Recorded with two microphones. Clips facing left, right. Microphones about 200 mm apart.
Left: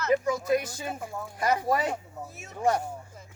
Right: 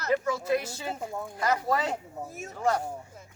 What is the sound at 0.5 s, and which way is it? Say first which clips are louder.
Speech: left 1 dB; 25° right (ahead or behind).